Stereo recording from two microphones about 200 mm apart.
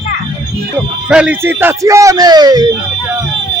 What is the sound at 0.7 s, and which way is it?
Speech, 5° right (ahead or behind).